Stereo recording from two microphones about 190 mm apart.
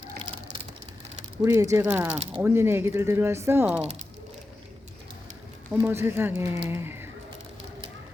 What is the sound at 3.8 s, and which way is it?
Speech, 35° right (ahead or behind).